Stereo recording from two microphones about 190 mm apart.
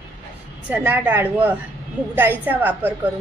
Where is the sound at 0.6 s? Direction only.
10° right (ahead or behind).